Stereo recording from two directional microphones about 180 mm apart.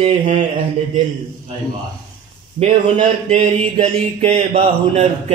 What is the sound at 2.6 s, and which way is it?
Speech, 35° right (ahead or behind).